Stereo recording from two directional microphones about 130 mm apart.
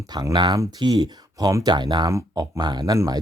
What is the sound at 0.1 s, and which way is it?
Speech, 35° right (ahead or behind).